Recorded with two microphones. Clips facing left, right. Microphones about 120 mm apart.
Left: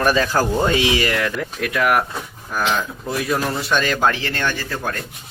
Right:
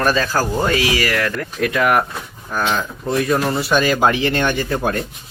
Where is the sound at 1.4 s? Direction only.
Centre (ahead or behind).